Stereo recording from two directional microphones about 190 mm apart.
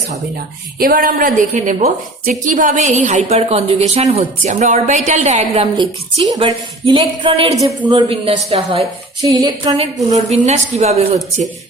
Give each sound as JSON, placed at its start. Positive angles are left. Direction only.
{"t": 0.8, "sound": "a woman's voice", "side_deg": -50}